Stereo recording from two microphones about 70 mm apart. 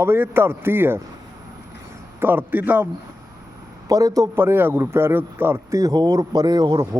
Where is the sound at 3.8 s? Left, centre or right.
Right.